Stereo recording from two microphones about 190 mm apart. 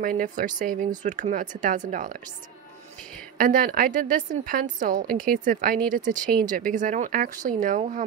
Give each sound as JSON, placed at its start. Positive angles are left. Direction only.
{"t": 0.0, "sound": "a woman's voice", "side_deg": -45}
{"t": 3.3, "sound": "a woman's voice", "side_deg": -45}